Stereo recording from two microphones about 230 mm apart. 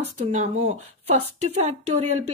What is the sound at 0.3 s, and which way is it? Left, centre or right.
Speech, right.